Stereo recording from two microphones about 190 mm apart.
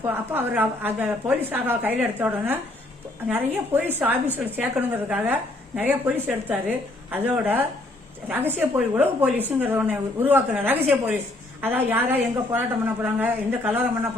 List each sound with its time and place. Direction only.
0.0 s a woman's voice: 10° right (ahead or behind)